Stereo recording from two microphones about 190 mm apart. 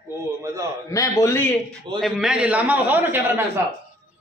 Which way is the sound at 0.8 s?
15° left (ahead or behind).